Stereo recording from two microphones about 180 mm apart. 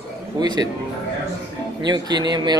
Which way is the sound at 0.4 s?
25° right (ahead or behind).